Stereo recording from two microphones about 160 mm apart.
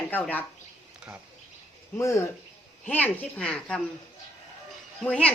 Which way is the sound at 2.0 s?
20° left (ahead or behind).